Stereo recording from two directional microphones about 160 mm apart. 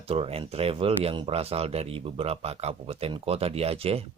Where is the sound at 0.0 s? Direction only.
40° right (ahead or behind).